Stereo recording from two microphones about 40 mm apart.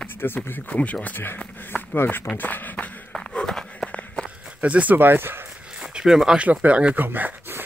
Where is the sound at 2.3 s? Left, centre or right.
Left.